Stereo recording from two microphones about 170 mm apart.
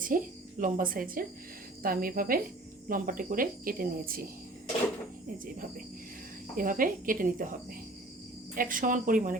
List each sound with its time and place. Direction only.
0.1 s speech: 55° right (ahead or behind)
6.6 s speech: 55° right (ahead or behind)
8.5 s speech: 55° right (ahead or behind)